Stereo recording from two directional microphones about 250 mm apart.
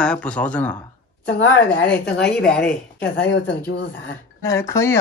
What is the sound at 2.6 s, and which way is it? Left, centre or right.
Speech, left.